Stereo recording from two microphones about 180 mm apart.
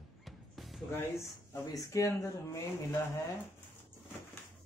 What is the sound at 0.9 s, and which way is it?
Speech, 15° left (ahead or behind).